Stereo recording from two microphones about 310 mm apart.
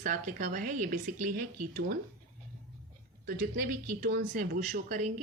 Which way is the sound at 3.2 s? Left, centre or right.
Right.